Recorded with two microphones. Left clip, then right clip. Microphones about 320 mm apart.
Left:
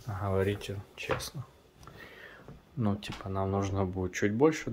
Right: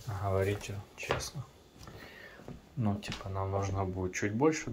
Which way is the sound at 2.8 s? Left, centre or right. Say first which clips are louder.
Left 2 dB; centre.